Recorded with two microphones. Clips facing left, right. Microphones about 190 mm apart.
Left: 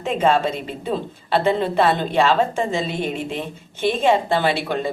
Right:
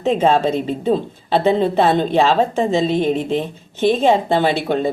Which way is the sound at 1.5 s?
25° right (ahead or behind).